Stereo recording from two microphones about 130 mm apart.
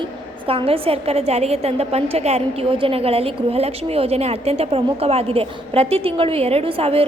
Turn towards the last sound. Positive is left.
turn(degrees=-45)  # may be behind; listen again after turning